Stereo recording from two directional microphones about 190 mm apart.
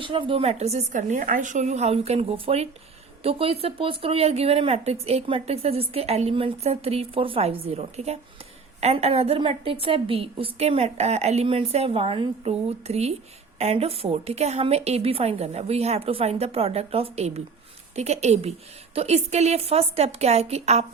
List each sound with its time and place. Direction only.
0.0 s speech: 25° right (ahead or behind)